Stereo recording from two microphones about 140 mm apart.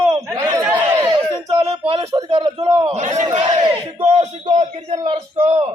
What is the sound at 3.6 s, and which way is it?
Battle cry, 35° right (ahead or behind).